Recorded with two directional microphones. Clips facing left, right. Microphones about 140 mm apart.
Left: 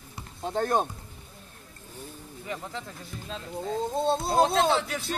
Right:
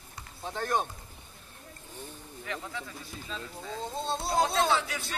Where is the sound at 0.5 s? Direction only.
45° left (ahead or behind).